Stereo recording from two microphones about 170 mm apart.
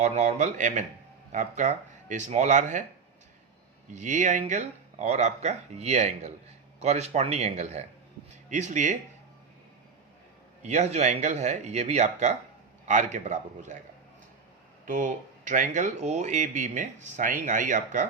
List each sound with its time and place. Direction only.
0.0 s speech: 45° right (ahead or behind)
3.9 s a man's voice: 45° right (ahead or behind)
10.6 s speech: 45° right (ahead or behind)
14.8 s speech: 45° right (ahead or behind)